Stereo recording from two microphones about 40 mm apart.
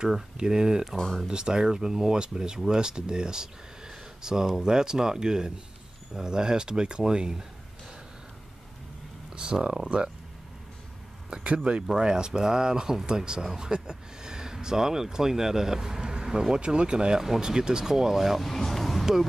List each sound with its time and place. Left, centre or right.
0.4 s speech: centre
0.9 s speech: centre
1.2 s speech: centre
9.3 s speech: right
11.4 s speech: right; by 18.4 s centre
18.4 s vehicle: centre